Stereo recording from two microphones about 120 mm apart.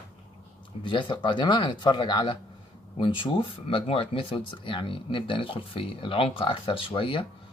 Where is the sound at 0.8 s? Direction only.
40° left (ahead or behind).